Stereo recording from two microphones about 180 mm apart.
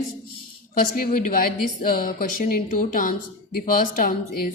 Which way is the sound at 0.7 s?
50° left (ahead or behind).